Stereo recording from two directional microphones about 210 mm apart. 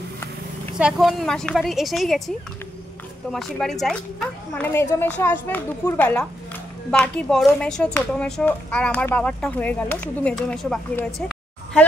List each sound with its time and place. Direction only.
0.7 s a child's voice: 5° right (ahead or behind)